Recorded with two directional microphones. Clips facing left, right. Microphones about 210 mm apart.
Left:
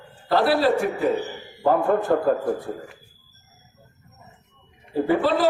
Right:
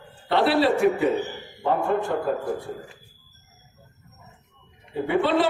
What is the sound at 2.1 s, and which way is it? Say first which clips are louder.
Speech: left 6 dB; 55° left (ahead or behind).